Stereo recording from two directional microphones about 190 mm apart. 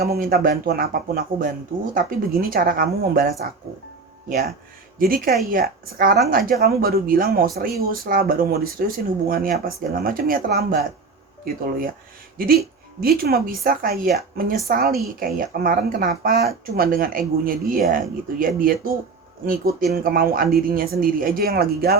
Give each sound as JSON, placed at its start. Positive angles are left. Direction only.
{"t": 0.0, "sound": "speech", "side_deg": -50}
{"t": 13.0, "sound": "speech", "side_deg": -50}
{"t": 19.9, "sound": "speech", "side_deg": -50}